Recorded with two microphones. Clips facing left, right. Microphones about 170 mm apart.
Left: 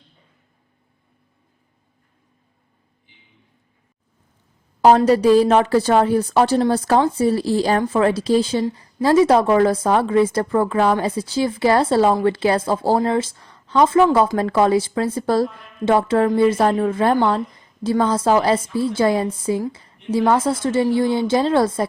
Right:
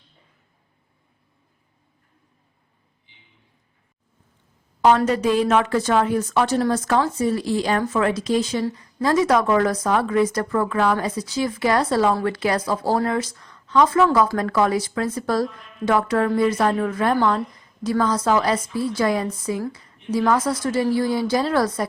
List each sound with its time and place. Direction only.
4.8 s speech: 35° left (ahead or behind)
19.7 s a sound: 30° left (ahead or behind)
20.1 s speech: 25° left (ahead or behind)